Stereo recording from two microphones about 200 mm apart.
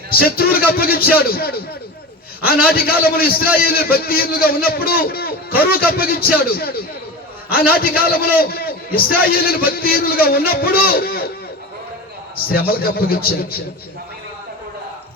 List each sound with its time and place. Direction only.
0.1 s a man's voice: 50° left (ahead or behind)
12.5 s a man's voice: 50° left (ahead or behind)